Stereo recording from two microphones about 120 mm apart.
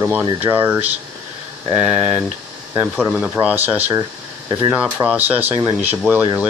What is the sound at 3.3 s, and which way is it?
Speech, 15° right (ahead or behind).